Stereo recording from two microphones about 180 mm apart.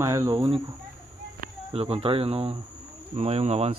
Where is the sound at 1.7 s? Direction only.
35° right (ahead or behind).